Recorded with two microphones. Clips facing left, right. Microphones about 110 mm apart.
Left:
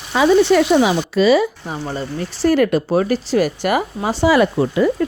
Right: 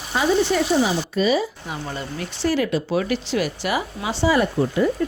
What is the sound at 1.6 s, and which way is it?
Speech, 35° left (ahead or behind).